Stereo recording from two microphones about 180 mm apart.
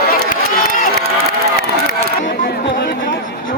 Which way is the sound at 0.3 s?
50° left (ahead or behind).